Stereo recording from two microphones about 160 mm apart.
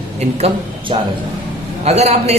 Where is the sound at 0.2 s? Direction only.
40° right (ahead or behind).